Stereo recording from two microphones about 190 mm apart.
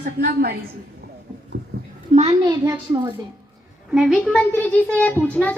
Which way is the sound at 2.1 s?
35° right (ahead or behind).